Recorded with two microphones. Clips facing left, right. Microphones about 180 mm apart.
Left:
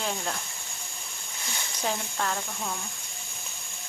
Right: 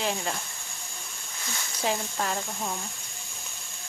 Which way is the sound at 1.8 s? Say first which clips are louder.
Right 2 dB; 10° right (ahead or behind).